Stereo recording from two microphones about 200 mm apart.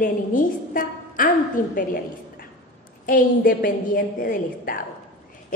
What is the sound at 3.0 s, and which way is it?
A woman's voice, 45° left (ahead or behind).